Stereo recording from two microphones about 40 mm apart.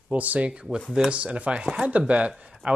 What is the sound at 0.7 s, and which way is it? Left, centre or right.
Speech, centre.